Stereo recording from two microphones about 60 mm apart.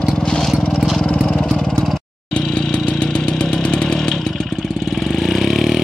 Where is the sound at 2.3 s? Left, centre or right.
Centre.